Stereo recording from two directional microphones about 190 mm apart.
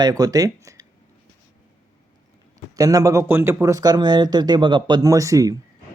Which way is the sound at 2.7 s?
20° right (ahead or behind).